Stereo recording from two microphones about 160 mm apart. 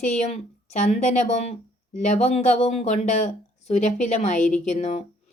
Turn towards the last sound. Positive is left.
turn(degrees=45)  # may be behind; listen again after turning